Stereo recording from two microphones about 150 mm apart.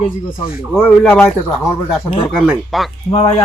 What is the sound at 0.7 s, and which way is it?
Speech, 10° left (ahead or behind).